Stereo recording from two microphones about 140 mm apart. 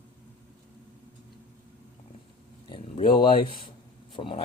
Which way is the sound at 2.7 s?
35° left (ahead or behind).